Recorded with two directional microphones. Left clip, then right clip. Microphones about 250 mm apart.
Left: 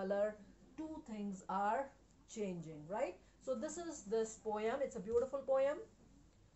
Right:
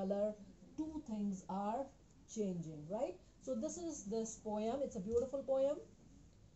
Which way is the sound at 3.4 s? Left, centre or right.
Left.